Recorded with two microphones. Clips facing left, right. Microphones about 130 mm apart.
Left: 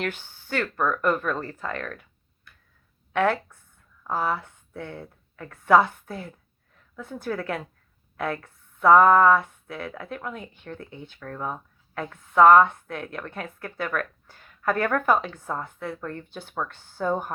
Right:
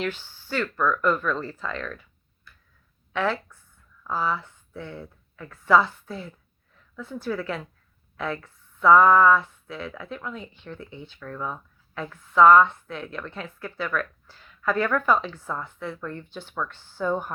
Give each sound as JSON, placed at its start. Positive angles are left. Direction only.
{"t": 0.0, "sound": "speech", "side_deg": 50}